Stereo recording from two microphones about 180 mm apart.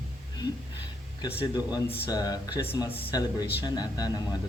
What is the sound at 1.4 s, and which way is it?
Speech, 20° left (ahead or behind).